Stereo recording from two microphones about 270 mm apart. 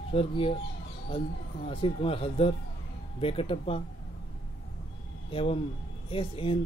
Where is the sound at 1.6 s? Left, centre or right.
Centre.